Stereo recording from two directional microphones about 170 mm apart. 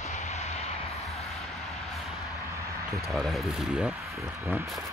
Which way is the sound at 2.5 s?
15° right (ahead or behind).